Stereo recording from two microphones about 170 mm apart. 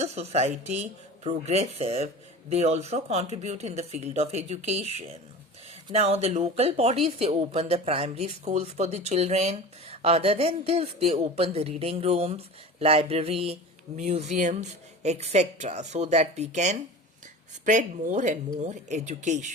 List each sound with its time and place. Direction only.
0.0 s speech: 40° right (ahead or behind)
5.9 s speech: 40° right (ahead or behind)